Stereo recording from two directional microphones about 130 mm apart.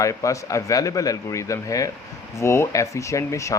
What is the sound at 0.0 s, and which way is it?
Speech, 25° left (ahead or behind).